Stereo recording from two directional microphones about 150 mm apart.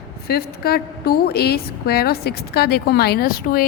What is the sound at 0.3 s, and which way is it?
A woman's voice, 90° left.